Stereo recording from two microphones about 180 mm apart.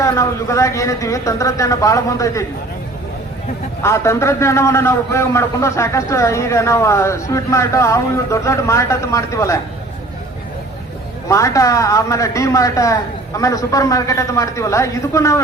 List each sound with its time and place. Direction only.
0.0 s a man's voice: 15° left (ahead or behind)
3.8 s a man's voice: 15° left (ahead or behind)
11.3 s a man's voice: 15° left (ahead or behind)